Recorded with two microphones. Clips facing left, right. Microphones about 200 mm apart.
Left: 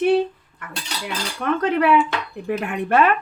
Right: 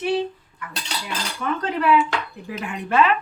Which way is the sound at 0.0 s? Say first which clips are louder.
Left 5 dB; 55° left (ahead or behind).